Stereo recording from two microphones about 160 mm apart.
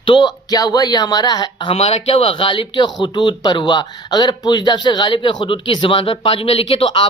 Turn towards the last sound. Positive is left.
turn(degrees=35)  # may be behind; listen again after turning